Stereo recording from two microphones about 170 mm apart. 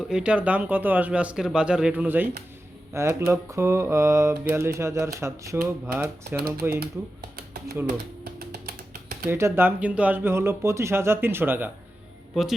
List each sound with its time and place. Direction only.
0.0 s speech: 5° right (ahead or behind)
7.3 s music: 60° right (ahead or behind)
8.4 s a sound: 60° right (ahead or behind)
9.3 s speech: 15° right (ahead or behind)
12.3 s speech: centre (ahead or behind)